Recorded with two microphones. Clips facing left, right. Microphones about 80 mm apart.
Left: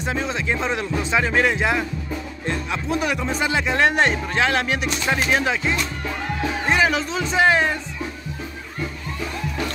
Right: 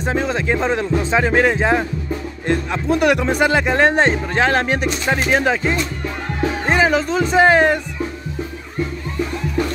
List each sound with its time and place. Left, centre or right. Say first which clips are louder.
0.0 s speech: right 5 dB; right